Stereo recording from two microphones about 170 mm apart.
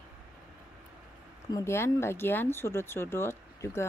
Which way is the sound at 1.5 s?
15° left (ahead or behind).